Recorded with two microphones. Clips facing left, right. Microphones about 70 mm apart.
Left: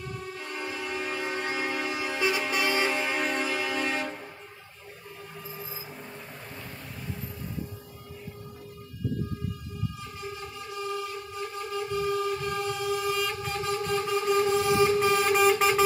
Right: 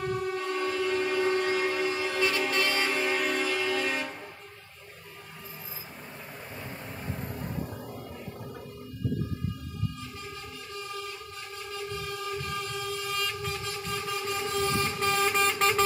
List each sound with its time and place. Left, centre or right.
0.0 s train: right
0.6 s train: centre
1.9 s vehicle: centre
11.7 s train: centre
14.5 s vehicle: centre